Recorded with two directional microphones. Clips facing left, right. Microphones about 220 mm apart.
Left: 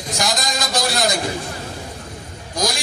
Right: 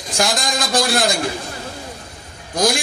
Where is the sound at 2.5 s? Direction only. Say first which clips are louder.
Right 5 dB; 55° right (ahead or behind).